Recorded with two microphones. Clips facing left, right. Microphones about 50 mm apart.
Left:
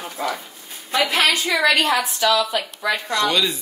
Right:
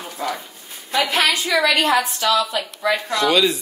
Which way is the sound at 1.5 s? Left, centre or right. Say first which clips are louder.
Right 1 dB; centre.